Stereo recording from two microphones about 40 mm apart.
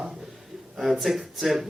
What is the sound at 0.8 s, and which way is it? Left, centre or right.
Speech, centre.